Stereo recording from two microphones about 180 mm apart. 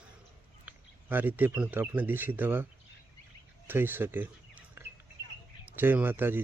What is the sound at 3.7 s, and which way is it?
Speech, 10° right (ahead or behind).